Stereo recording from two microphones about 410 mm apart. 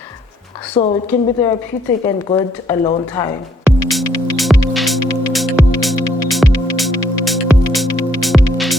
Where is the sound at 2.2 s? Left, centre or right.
Centre.